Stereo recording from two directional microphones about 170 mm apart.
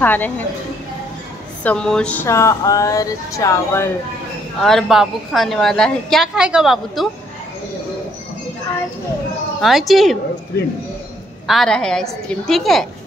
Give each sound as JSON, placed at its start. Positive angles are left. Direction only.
{"t": 0.0, "sound": "speech", "side_deg": 10}
{"t": 1.6, "sound": "speech", "side_deg": 5}
{"t": 4.6, "sound": "a woman's voice", "side_deg": 0}
{"t": 9.6, "sound": "a woman's voice", "side_deg": 0}
{"t": 11.4, "sound": "a woman's voice", "side_deg": 0}